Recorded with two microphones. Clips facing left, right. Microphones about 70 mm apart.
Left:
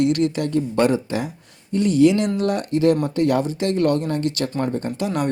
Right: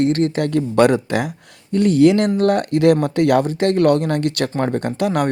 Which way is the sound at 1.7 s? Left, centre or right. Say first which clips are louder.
Right 3 dB; right.